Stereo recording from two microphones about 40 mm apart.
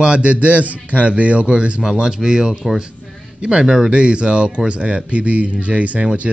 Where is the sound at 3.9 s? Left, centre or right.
Right.